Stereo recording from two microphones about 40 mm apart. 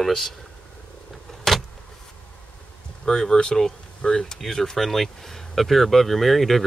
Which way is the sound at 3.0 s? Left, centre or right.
Centre.